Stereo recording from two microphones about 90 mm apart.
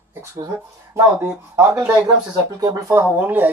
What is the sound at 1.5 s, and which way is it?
Speech, 25° right (ahead or behind).